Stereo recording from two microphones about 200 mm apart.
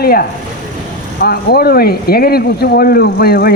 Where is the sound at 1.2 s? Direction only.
50° left (ahead or behind).